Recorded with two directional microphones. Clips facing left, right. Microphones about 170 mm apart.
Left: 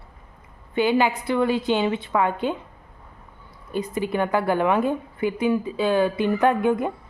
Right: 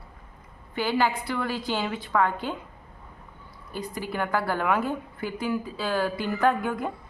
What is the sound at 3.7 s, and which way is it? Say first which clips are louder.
A woman's voice: left 7 dB; 20° left (ahead or behind).